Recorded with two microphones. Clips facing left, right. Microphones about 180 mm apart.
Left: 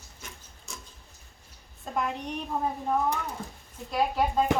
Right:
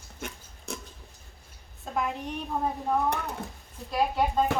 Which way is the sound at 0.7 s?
60° right (ahead or behind).